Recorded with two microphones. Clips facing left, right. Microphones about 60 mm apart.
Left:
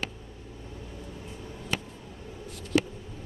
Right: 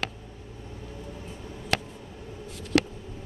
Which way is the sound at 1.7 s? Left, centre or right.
Right.